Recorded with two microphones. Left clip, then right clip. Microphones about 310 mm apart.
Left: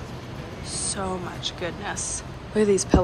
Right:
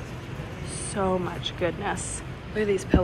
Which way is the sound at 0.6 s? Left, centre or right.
Centre.